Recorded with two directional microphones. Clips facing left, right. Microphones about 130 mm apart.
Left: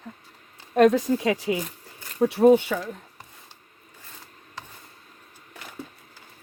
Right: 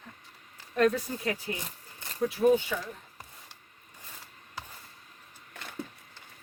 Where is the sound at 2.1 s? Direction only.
75° left (ahead or behind).